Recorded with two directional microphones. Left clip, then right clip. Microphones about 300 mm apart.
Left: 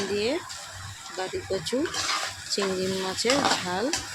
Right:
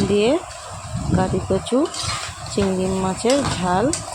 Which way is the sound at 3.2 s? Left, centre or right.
Centre.